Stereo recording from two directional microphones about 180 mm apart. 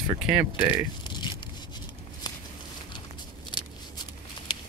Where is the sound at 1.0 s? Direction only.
25° left (ahead or behind).